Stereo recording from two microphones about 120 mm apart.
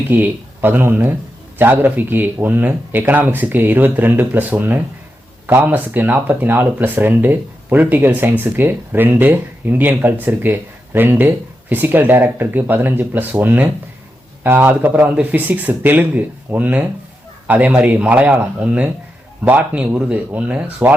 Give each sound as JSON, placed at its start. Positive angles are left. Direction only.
{"t": 0.1, "sound": "speech", "side_deg": -15}